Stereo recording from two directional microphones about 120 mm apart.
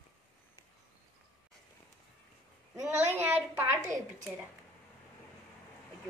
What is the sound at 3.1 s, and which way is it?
Speech, 20° right (ahead or behind).